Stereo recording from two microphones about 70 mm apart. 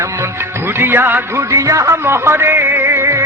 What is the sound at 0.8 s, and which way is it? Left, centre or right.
Music, right.